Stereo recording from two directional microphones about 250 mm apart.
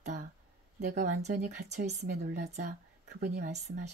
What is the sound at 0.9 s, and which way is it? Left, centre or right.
Speech, right.